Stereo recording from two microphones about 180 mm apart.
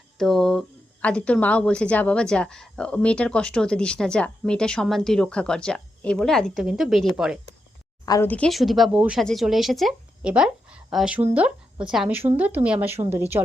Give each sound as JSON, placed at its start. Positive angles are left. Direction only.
{"t": 0.2, "sound": "a woman's voice", "side_deg": 0}
{"t": 8.0, "sound": "speech", "side_deg": 20}
{"t": 8.3, "sound": "a woman's voice", "side_deg": 5}